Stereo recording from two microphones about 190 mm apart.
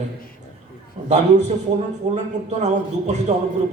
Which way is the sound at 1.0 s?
35° right (ahead or behind).